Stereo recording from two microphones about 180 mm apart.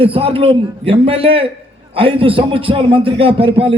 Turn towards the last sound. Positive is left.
turn(degrees=-30)  # may be behind; listen again after turning